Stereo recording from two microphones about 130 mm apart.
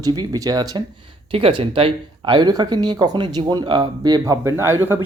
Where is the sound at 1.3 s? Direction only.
40° right (ahead or behind).